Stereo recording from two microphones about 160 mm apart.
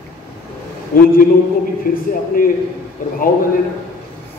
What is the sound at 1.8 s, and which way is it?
Speech, 65° left (ahead or behind).